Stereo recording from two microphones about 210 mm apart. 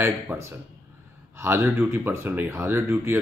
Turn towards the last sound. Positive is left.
turn(degrees=-10)  # may be behind; listen again after turning